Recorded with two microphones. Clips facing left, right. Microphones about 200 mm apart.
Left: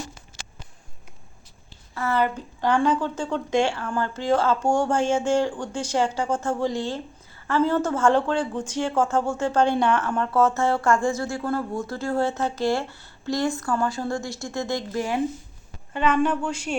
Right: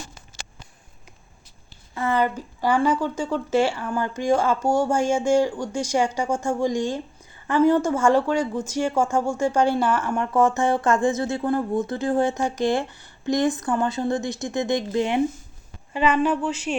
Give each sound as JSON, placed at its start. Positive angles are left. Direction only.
{"t": 2.0, "sound": "speech", "side_deg": -15}
{"t": 15.9, "sound": "a woman's voice", "side_deg": -5}